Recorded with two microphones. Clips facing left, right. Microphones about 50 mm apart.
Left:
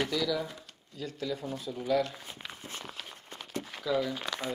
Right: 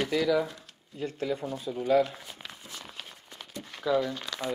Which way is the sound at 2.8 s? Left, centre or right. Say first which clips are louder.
Left 1 dB; centre.